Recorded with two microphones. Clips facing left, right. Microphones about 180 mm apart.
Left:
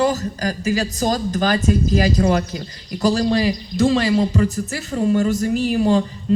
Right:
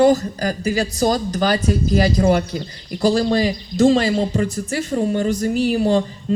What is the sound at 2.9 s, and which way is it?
Speech, 40° right (ahead or behind).